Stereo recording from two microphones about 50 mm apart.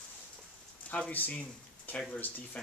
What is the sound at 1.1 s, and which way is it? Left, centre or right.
Speech, left.